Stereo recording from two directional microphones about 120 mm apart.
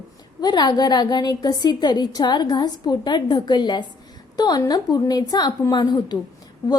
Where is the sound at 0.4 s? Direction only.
35° left (ahead or behind).